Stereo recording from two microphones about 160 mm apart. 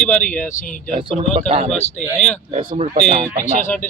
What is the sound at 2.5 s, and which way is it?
Speech, 45° right (ahead or behind).